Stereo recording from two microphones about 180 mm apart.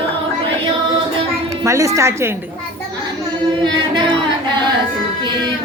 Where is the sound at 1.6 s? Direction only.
15° right (ahead or behind).